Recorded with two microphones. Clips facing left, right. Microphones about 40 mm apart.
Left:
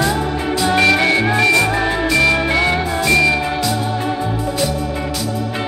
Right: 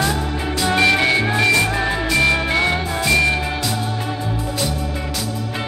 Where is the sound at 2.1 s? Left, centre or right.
Left.